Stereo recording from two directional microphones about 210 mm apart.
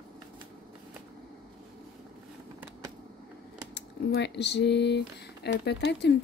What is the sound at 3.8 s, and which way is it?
A woman's voice, 55° left (ahead or behind).